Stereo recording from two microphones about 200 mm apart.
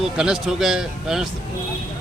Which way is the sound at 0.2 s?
5° right (ahead or behind).